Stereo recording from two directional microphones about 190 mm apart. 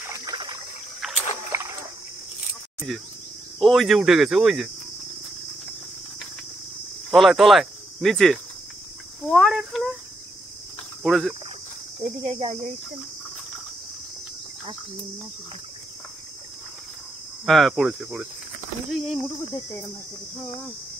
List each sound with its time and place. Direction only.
0.0 s trickle: 20° right (ahead or behind)
1.0 s rowboat: centre (ahead or behind)
1.5 s a sound: 15° right (ahead or behind)
2.9 s speech: centre (ahead or behind)
7.1 s speech: centre (ahead or behind)
11.0 s speech: centre (ahead or behind)
12.0 s speech: 30° right (ahead or behind)
17.5 s speech: centre (ahead or behind)